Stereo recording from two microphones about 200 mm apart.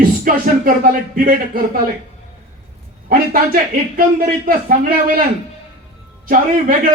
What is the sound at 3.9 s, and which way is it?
Speech, 45° right (ahead or behind).